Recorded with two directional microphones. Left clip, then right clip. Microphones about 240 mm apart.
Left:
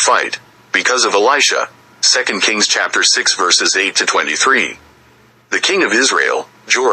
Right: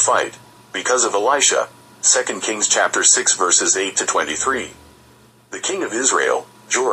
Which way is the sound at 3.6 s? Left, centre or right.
Left.